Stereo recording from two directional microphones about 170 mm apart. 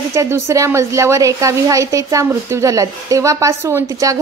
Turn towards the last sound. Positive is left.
turn(degrees=-20)  # may be behind; listen again after turning